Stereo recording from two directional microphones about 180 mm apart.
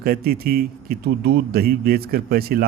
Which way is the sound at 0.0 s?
60° right (ahead or behind).